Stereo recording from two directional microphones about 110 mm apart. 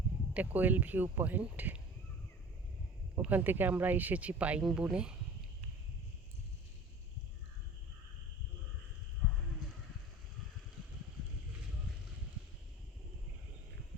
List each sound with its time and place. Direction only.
0.3 s speech: 15° right (ahead or behind)
3.2 s speech: 15° right (ahead or behind)